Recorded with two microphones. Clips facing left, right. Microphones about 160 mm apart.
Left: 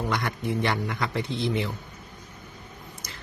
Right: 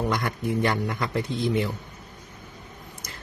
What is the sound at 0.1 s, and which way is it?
A man's voice, 45° right (ahead or behind).